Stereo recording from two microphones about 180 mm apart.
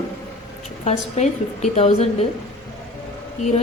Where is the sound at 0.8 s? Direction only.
40° left (ahead or behind).